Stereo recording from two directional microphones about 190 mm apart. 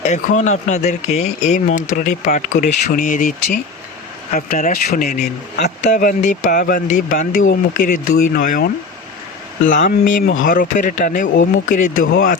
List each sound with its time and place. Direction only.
0.0 s speech: 40° left (ahead or behind); by 5.6 s 55° left (ahead or behind)
5.6 s speech: 40° left (ahead or behind)